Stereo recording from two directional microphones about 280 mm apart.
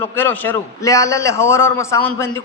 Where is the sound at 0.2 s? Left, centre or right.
Centre.